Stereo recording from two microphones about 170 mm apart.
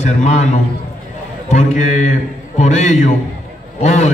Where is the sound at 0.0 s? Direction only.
40° left (ahead or behind).